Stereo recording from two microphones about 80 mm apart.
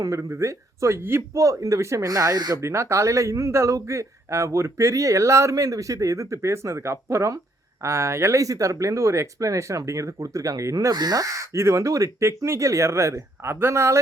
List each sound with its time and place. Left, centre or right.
0.0 s speech: right
2.6 s speech: right